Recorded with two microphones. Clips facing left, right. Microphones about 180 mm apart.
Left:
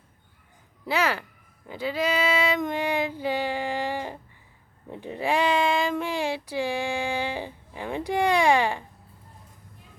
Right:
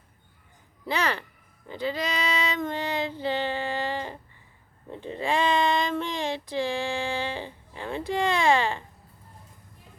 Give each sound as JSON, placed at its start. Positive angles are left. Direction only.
{"t": 0.9, "sound": "child singing", "side_deg": 5}